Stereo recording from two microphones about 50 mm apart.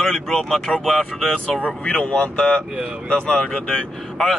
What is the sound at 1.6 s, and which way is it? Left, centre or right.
Speech, left.